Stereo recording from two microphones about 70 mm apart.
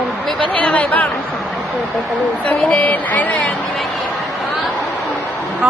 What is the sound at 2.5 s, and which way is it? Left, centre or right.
A woman's voice, centre.